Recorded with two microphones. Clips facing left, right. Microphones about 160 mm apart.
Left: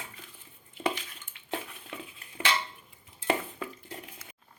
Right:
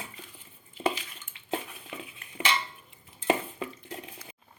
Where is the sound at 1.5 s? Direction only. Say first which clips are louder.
Right 3 dB; 10° right (ahead or behind).